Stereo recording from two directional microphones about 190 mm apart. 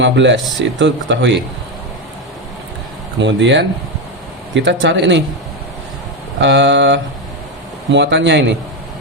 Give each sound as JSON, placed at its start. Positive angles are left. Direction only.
{"t": 0.0, "sound": "speech", "side_deg": -70}
{"t": 3.2, "sound": "speech", "side_deg": -70}
{"t": 6.4, "sound": "speech", "side_deg": -70}